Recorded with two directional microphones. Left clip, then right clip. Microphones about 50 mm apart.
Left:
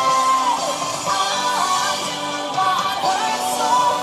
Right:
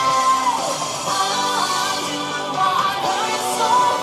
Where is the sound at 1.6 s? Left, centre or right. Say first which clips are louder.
Left 1 dB; centre.